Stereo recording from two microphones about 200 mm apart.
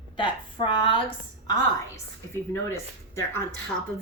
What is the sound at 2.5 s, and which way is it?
Speech, 10° left (ahead or behind).